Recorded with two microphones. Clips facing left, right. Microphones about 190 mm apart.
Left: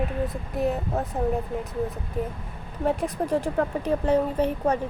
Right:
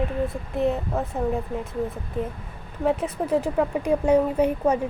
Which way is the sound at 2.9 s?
5° right (ahead or behind).